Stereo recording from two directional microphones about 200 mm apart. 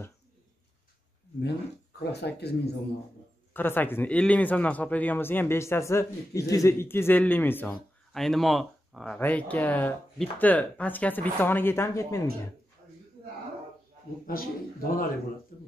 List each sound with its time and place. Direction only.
2.0 s speech: 55° left (ahead or behind)
3.5 s speech: 10° left (ahead or behind)
14.2 s a man's voice: 45° left (ahead or behind)